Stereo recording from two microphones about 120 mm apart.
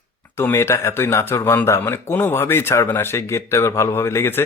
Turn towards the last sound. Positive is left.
turn(degrees=20)  # may be behind; listen again after turning